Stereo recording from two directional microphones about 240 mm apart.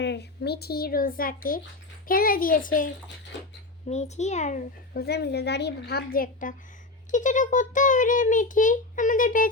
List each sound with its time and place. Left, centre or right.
0.0 s a child's voice: left